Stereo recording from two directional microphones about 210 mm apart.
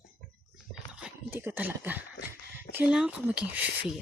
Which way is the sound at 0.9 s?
5° right (ahead or behind).